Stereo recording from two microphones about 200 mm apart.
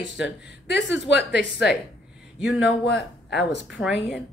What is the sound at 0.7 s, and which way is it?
A woman's voice, 60° left (ahead or behind).